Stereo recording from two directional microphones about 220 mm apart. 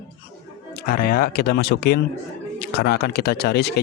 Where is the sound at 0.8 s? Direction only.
40° left (ahead or behind).